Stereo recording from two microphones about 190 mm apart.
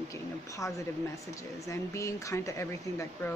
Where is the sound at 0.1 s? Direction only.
15° left (ahead or behind).